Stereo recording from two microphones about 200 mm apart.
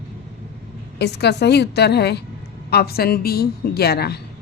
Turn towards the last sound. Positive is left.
turn(degrees=55)  # may be behind; listen again after turning